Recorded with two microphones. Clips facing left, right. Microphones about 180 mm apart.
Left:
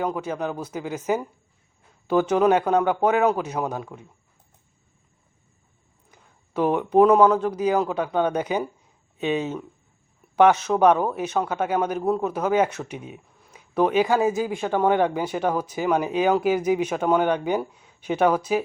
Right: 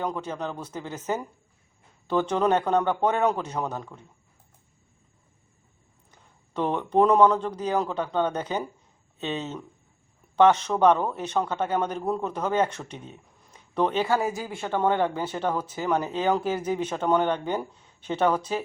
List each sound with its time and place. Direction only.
0.0 s a man's voice: 10° left (ahead or behind)
6.1 s a man's voice: 10° left (ahead or behind)